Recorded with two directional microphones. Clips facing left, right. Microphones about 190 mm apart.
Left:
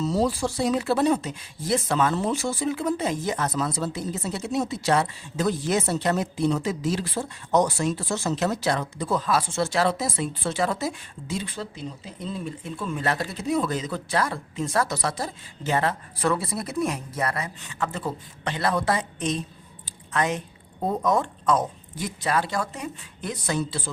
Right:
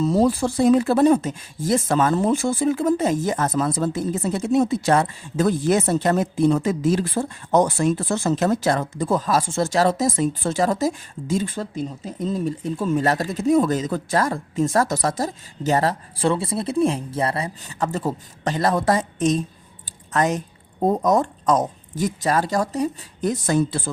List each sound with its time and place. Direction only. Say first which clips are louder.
0.0 s speech: right 5 dB; 55° right (ahead or behind)